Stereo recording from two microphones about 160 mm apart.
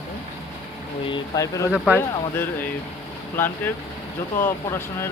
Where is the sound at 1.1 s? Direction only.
20° left (ahead or behind).